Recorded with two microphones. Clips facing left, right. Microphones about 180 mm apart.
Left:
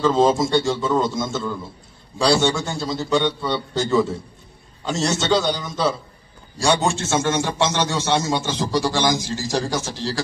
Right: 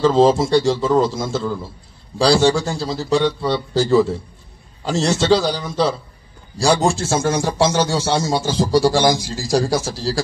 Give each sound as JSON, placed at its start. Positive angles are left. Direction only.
{"t": 0.0, "sound": "a man's voice", "side_deg": -35}